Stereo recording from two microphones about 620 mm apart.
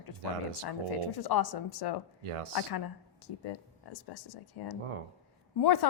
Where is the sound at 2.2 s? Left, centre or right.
Right.